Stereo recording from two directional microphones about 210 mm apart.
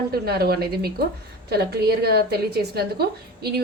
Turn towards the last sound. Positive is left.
turn(degrees=-50)  # may be behind; listen again after turning